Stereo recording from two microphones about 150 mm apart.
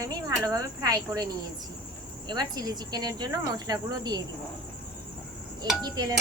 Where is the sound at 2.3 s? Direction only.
30° right (ahead or behind).